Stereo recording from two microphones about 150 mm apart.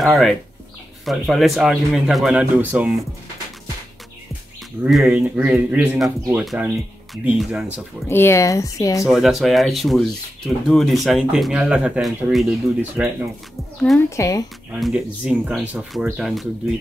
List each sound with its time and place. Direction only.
0.0 s speech: centre (ahead or behind)
4.8 s speech: 5° right (ahead or behind)
6.0 s speech: 15° right (ahead or behind)
7.2 s speech: 5° right (ahead or behind)
8.1 s speech: 15° left (ahead or behind)
9.0 s speech: centre (ahead or behind)
13.9 s speech: 20° left (ahead or behind)
14.8 s speech: 5° right (ahead or behind)